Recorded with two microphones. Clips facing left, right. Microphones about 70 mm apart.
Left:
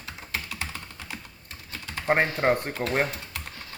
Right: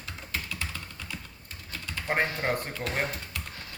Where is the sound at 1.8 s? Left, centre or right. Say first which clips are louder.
Left 5 dB; left.